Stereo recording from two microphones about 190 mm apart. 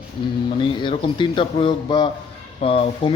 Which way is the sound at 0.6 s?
25° left (ahead or behind).